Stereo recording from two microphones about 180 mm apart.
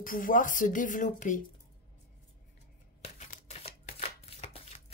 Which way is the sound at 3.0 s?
40° left (ahead or behind).